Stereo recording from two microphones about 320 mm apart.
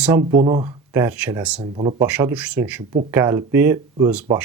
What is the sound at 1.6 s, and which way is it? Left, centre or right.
Speech, centre.